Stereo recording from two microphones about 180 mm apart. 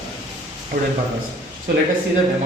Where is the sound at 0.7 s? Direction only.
55° right (ahead or behind).